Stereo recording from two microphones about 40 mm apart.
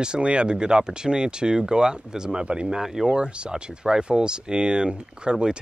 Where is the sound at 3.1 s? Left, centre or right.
Right.